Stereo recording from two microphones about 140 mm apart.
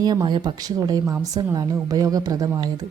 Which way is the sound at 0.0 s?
30° right (ahead or behind).